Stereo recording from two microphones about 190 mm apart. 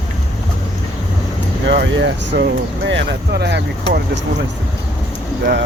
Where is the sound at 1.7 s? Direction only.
65° right (ahead or behind).